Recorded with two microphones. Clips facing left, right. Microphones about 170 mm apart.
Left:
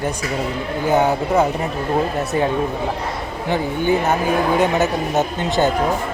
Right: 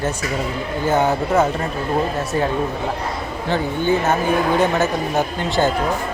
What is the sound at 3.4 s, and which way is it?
Speech, 15° left (ahead or behind).